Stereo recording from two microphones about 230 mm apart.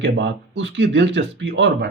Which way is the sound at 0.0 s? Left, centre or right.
Right.